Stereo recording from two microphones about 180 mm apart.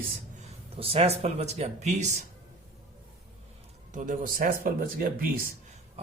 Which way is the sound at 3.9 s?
45° right (ahead or behind).